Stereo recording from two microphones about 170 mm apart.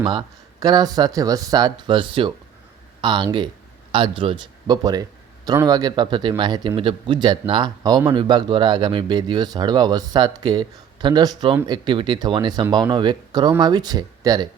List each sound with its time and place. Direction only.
0.0 s speech: 25° right (ahead or behind)